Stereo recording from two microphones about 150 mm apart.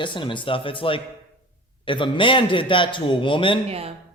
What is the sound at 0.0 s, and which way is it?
A man's voice, 35° left (ahead or behind).